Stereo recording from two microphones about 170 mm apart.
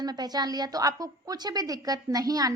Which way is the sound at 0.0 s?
25° right (ahead or behind).